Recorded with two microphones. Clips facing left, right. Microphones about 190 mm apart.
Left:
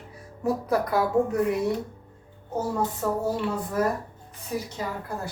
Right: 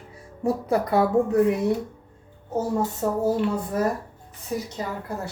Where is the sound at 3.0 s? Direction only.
25° right (ahead or behind).